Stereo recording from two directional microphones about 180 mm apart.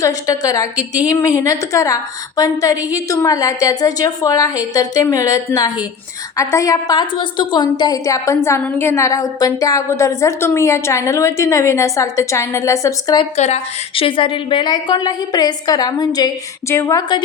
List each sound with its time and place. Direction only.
0.0 s a woman's voice: 20° left (ahead or behind)
13.3 s a woman's voice: 40° left (ahead or behind); by 17.0 s 15° left (ahead or behind)